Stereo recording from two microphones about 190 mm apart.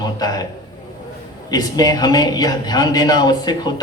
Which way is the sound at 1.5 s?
20° left (ahead or behind).